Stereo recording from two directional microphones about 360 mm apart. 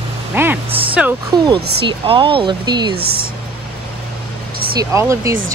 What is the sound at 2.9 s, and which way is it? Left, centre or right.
Speech, right.